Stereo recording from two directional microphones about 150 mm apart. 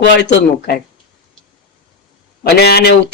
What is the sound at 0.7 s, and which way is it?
Speech, 90° left.